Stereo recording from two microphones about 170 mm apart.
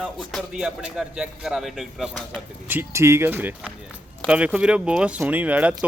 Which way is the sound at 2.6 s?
15° right (ahead or behind).